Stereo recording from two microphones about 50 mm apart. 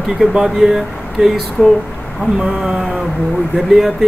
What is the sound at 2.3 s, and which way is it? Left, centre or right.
Speech, centre.